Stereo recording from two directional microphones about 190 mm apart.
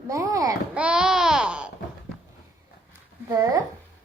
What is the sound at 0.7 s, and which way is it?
Babbling, 5° right (ahead or behind).